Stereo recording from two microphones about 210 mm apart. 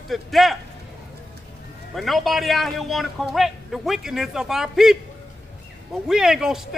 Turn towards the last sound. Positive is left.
turn(degrees=0)  # may be behind; listen again after turning